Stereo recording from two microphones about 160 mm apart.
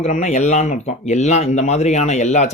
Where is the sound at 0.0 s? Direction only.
45° left (ahead or behind).